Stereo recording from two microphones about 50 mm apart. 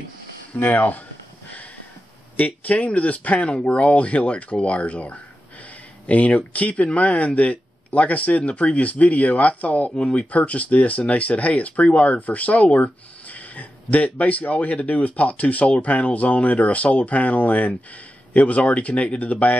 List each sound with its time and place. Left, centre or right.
0.6 s speech: left
2.3 s speech: left